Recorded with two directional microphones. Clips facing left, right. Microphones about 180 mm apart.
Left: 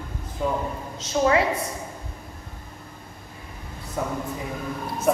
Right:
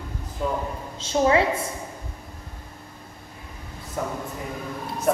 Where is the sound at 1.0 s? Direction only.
30° right (ahead or behind).